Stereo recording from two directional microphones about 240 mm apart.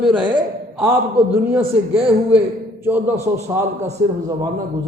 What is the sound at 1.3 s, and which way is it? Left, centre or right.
A man's voice, centre.